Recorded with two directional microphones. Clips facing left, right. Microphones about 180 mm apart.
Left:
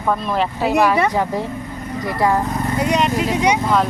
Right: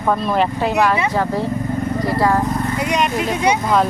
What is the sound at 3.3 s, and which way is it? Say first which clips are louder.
Speech: even; 15° left (ahead or behind).